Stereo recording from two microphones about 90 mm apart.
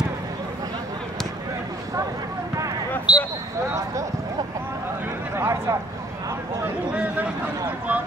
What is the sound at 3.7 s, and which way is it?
Speech, 35° right (ahead or behind).